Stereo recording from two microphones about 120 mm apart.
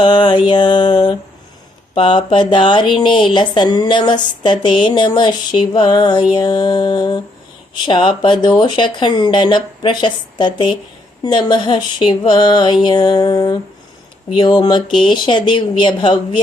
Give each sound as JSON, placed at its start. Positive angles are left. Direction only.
{"t": 0.0, "sound": "speech", "side_deg": 40}